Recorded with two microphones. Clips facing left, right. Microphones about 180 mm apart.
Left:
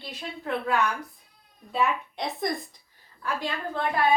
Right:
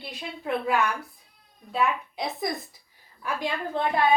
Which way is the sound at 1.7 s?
Centre (ahead or behind).